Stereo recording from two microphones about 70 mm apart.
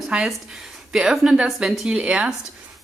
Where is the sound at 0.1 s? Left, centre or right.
Centre.